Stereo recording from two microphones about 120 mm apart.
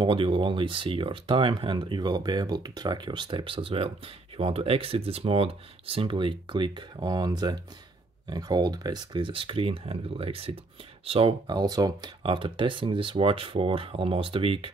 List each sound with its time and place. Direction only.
0.0 s speech: 45° right (ahead or behind)
11.4 s speech: 35° right (ahead or behind)
12.2 s speech: 45° right (ahead or behind)